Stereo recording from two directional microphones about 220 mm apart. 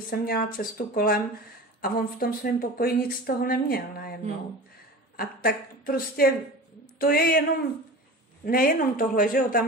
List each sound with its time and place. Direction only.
0.1 s a woman's voice: 40° left (ahead or behind)
8.5 s speech: 40° left (ahead or behind)